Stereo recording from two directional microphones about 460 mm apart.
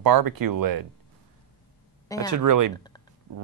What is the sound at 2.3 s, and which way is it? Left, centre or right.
Speech, right.